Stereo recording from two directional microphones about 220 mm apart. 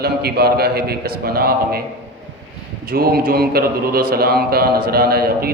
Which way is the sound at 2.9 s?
45° right (ahead or behind).